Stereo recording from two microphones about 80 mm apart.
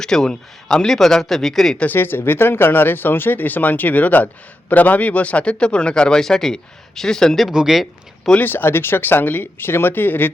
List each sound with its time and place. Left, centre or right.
0.0 s a man's voice: centre
1.8 s speech: left; by 8.3 s centre
8.3 s speech: left